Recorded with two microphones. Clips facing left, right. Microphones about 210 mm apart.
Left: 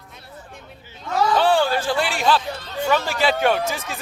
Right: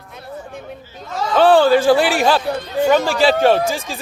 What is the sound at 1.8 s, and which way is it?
Speech, 65° right (ahead or behind).